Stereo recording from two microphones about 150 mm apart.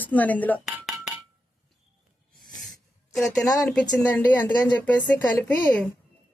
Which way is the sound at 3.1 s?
5° left (ahead or behind).